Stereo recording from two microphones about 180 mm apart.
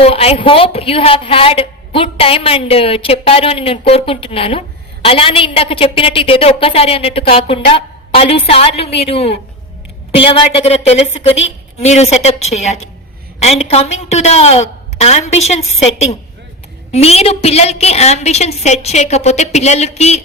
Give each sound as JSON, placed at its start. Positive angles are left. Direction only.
{"t": 0.0, "sound": "a woman's voice", "side_deg": 35}